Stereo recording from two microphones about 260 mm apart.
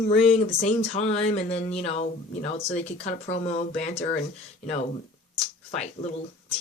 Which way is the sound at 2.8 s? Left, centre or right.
Left.